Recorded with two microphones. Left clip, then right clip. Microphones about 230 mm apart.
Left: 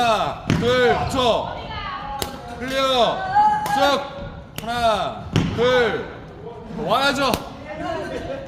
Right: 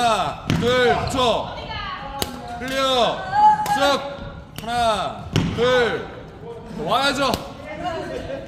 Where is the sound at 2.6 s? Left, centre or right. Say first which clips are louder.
Left 1 dB; centre.